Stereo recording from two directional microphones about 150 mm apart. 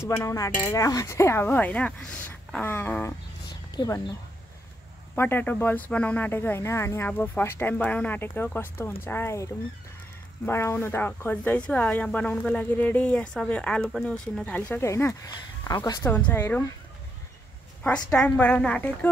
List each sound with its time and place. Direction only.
0.0 s speech: 20° left (ahead or behind)
5.1 s speech: 15° left (ahead or behind)
18.1 s speech: 5° left (ahead or behind)